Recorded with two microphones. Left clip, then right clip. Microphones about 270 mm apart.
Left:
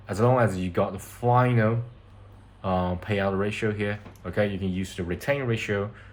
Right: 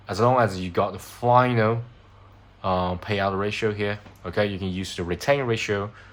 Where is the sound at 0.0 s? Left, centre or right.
Centre.